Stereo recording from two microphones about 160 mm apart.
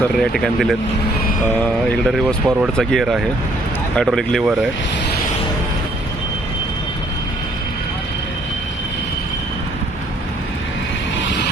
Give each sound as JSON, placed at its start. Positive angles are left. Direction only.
{"t": 0.0, "sound": "speech", "side_deg": 5}